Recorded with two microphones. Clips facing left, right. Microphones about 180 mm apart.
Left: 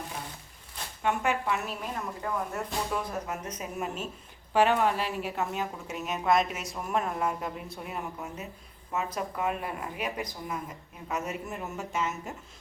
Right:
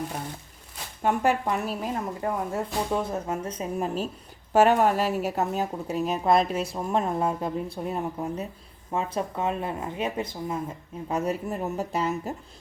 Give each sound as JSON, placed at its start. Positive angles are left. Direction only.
{"t": 1.0, "sound": "a woman's voice", "side_deg": -35}